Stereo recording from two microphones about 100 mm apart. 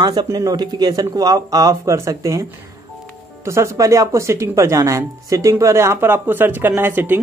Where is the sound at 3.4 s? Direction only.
30° right (ahead or behind).